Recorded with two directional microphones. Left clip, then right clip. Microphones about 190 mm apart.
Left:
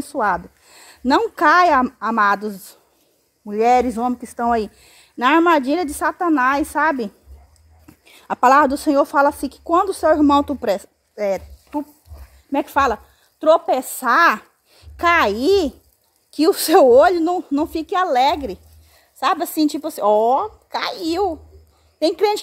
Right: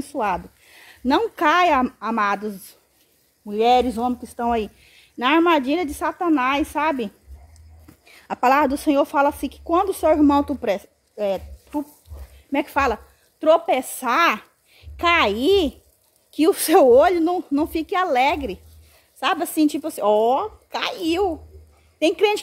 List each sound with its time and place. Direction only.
0.1 s speech: 20° left (ahead or behind)
3.8 s speech: 25° left (ahead or behind)
8.1 s a woman's voice: 25° left (ahead or behind)